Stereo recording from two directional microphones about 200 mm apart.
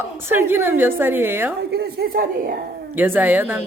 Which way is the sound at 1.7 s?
50° right (ahead or behind).